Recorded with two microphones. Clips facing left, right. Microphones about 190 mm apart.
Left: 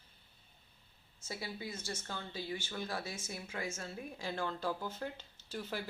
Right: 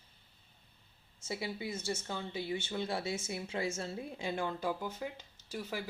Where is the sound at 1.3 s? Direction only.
25° right (ahead or behind).